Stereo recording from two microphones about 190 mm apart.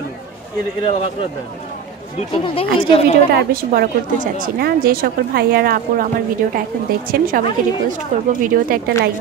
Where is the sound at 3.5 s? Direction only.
50° right (ahead or behind).